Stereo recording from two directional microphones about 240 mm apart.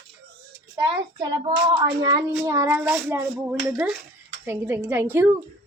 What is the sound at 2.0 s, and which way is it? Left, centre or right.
Speech, centre.